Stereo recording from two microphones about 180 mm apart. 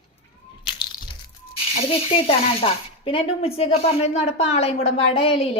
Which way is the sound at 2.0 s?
30° left (ahead or behind).